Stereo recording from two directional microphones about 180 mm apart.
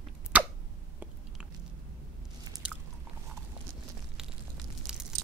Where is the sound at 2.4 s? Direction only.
20° right (ahead or behind).